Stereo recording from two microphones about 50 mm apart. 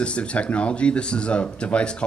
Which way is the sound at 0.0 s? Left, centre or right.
Left.